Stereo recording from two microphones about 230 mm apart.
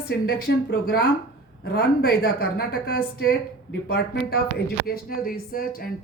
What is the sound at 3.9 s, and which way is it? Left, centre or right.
Speech, left.